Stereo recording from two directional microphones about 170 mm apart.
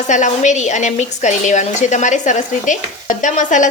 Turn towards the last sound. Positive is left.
turn(degrees=45)  # may be behind; listen again after turning